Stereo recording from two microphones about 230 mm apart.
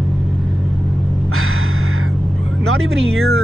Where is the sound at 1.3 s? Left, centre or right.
Right.